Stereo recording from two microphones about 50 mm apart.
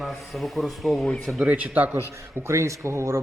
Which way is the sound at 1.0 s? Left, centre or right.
Centre.